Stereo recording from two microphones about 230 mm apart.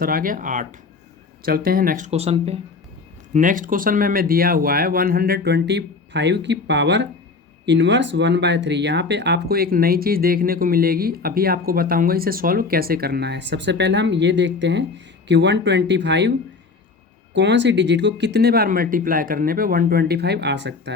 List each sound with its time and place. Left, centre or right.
0.0 s speech: right
17.3 s speech: right